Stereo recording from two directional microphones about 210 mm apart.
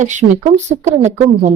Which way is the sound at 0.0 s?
35° right (ahead or behind).